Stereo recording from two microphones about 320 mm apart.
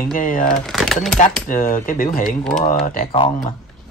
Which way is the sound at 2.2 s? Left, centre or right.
Centre.